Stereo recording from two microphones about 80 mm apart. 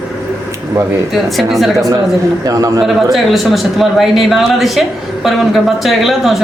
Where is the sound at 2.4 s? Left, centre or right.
Right.